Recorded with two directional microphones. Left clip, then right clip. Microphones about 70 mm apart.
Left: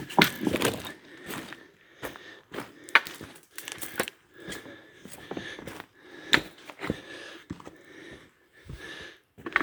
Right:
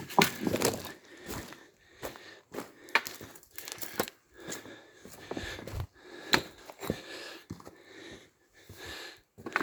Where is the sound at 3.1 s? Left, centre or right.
Right.